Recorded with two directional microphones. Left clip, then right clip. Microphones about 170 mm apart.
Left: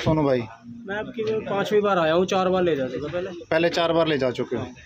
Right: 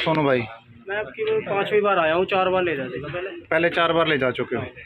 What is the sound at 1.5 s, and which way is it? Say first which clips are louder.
A man's voice: even; 90° left.